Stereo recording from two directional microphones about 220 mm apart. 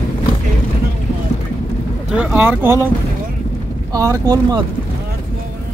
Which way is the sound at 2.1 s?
5° right (ahead or behind).